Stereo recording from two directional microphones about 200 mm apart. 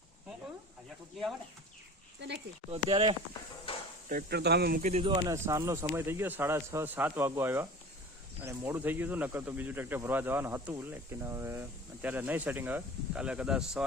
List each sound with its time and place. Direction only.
2.2 s speech: 60° right (ahead or behind)
2.6 s speech: 30° right (ahead or behind)
4.1 s speech: 55° right (ahead or behind); by 5.2 s 30° right (ahead or behind)
5.2 s speech: 15° right (ahead or behind)